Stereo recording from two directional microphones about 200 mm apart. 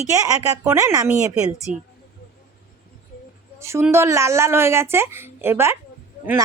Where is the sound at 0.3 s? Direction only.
15° right (ahead or behind).